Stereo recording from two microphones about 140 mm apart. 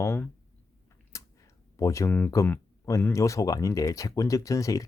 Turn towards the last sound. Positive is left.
turn(degrees=25)  # may be behind; listen again after turning